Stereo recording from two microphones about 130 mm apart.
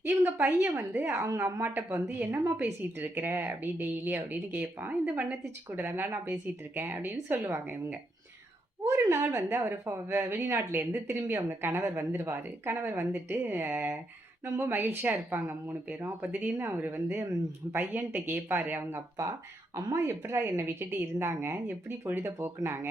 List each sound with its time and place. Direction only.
0.0 s a woman's voice: 15° right (ahead or behind)